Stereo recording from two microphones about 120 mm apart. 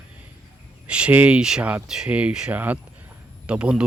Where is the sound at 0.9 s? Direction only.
10° right (ahead or behind).